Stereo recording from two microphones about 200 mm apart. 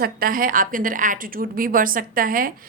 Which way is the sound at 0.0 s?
45° right (ahead or behind).